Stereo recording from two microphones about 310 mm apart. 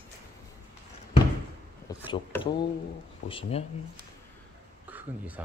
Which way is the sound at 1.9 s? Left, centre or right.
Centre.